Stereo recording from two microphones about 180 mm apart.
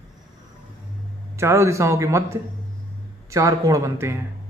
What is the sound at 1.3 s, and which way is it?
Speech, 15° right (ahead or behind).